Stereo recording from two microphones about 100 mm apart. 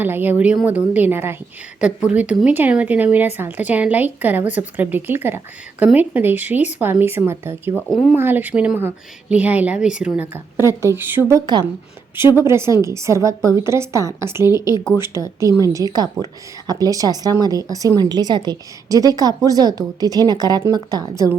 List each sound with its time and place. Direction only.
0.0 s a woman's voice: 20° right (ahead or behind)
1.8 s a woman's voice: 10° right (ahead or behind)
7.9 s speech: centre (ahead or behind)
8.1 s a woman's voice: 20° right (ahead or behind)
10.6 s a woman's voice: 25° right (ahead or behind)
11.3 s a woman's voice: 40° right (ahead or behind)
12.4 s a woman's voice: 25° right (ahead or behind); by 21.2 s 45° right (ahead or behind)